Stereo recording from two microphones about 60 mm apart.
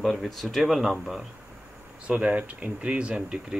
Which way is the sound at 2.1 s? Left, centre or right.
Centre.